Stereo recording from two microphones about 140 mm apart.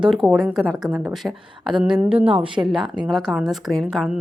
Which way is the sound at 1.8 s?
5° right (ahead or behind).